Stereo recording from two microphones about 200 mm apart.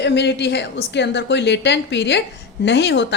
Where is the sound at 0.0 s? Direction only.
60° left (ahead or behind).